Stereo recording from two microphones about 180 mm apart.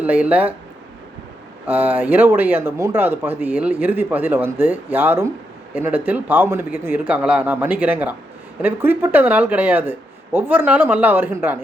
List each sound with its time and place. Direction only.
0.0 s speech: 10° right (ahead or behind)
1.6 s speech: 10° right (ahead or behind)